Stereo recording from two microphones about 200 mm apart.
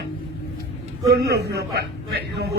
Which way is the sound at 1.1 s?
55° right (ahead or behind).